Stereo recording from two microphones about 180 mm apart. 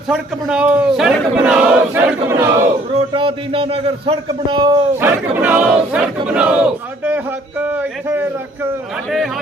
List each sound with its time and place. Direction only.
0.1 s speech: 5° right (ahead or behind)
3.1 s a man's voice: 25° right (ahead or behind)
4.9 s speech: 10° right (ahead or behind)
9.0 s speech: centre (ahead or behind)